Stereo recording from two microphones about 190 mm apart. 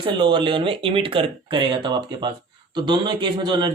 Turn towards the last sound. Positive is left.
turn(degrees=-25)  # may be behind; listen again after turning